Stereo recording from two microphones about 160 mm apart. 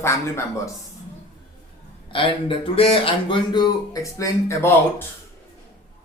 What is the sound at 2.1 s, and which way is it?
Speech, 35° left (ahead or behind).